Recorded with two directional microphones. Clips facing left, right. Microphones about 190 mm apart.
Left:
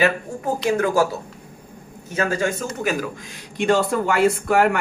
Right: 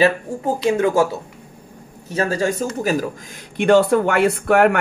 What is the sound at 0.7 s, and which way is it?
Speech, 25° right (ahead or behind).